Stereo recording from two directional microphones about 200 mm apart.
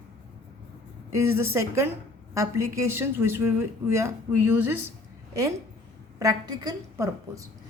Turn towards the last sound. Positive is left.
turn(degrees=-15)  # may be behind; listen again after turning